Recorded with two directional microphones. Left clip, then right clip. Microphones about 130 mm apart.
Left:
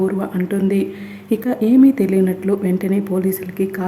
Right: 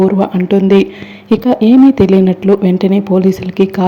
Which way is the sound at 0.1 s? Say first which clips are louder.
Right 10 dB; 30° right (ahead or behind).